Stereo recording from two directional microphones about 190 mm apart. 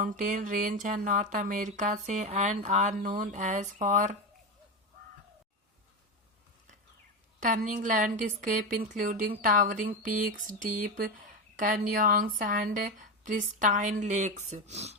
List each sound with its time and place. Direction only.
0.0 s speech: 45° right (ahead or behind)
7.3 s speech: 45° right (ahead or behind)